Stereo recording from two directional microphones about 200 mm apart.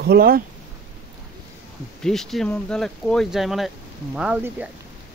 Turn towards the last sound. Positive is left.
turn(degrees=-10)  # may be behind; listen again after turning